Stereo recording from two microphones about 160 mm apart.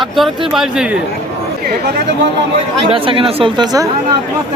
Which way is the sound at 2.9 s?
35° right (ahead or behind).